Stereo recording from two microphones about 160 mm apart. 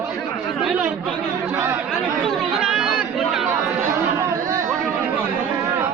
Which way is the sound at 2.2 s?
Centre (ahead or behind).